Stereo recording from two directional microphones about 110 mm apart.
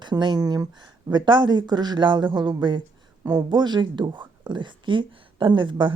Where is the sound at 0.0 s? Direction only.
45° right (ahead or behind).